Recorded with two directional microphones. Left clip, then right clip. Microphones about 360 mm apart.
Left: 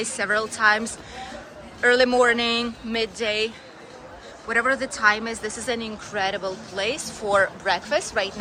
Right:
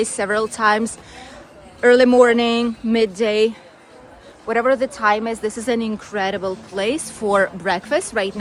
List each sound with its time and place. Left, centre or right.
0.0 s speech: centre